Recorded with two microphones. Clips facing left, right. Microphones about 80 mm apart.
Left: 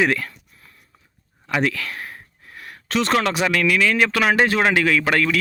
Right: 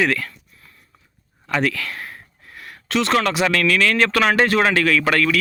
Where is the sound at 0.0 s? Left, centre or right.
Left.